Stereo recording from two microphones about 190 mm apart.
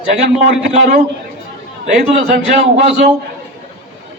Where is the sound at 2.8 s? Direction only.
35° right (ahead or behind).